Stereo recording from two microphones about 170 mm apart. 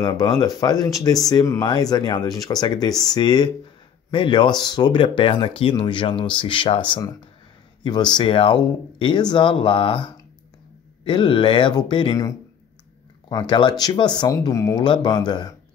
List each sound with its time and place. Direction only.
0.0 s speech: 25° left (ahead or behind)
2.9 s speech: centre (ahead or behind)
3.2 s speech: 25° left (ahead or behind)